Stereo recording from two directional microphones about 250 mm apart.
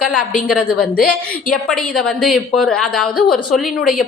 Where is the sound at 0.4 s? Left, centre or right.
Centre.